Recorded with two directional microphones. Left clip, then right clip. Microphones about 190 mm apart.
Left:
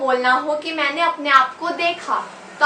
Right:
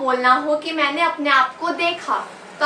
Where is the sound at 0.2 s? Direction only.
15° left (ahead or behind).